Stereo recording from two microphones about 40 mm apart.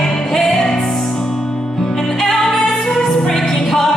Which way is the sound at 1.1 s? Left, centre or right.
Centre.